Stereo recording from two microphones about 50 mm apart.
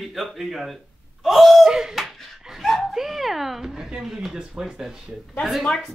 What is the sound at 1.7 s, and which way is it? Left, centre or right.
Speech, centre.